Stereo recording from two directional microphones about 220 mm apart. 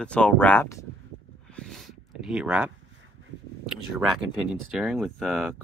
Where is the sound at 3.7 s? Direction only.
5° right (ahead or behind).